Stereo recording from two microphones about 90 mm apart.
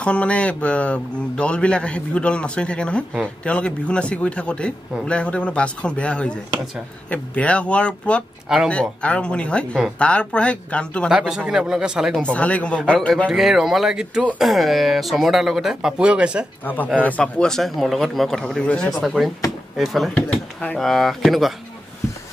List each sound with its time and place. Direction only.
0.0 s speech: 15° left (ahead or behind)
8.5 s speech: 5° right (ahead or behind)
9.0 s speech: 10° left (ahead or behind)
11.1 s speech: 10° right (ahead or behind)
12.2 s speech: 15° left (ahead or behind)
13.3 s speech: 5° right (ahead or behind)
16.6 s speech: 20° left (ahead or behind)
17.2 s speech: 5° left (ahead or behind)
19.0 s speech: centre (ahead or behind)
20.2 s speech: 10° left (ahead or behind)